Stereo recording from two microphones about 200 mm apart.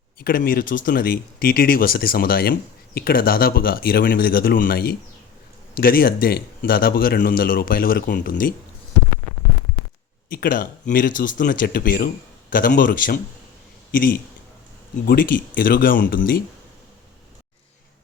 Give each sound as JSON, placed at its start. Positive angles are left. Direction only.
{"t": 0.2, "sound": "speech", "side_deg": 45}
{"t": 10.3, "sound": "speech", "side_deg": 45}